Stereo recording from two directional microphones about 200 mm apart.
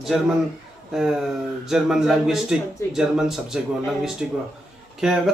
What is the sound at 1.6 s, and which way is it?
A man's voice, centre (ahead or behind).